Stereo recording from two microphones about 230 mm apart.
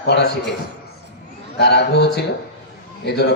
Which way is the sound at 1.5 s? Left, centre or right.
Left.